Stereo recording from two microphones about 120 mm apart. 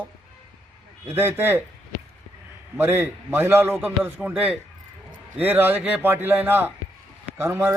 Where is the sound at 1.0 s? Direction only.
20° right (ahead or behind).